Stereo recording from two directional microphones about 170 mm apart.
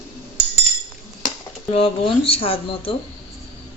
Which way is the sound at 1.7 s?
35° left (ahead or behind).